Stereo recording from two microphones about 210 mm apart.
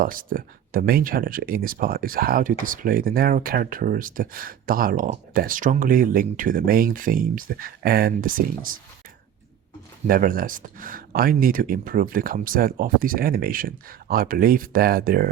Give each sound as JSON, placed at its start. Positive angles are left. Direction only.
{"t": 0.0, "sound": "speech", "side_deg": -40}
{"t": 10.1, "sound": "speech", "side_deg": -40}